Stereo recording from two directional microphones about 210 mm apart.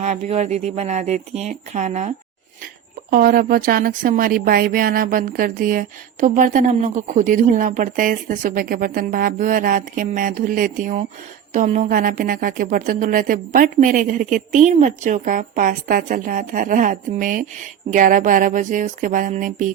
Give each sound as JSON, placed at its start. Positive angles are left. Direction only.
{"t": 0.0, "sound": "speech", "side_deg": -30}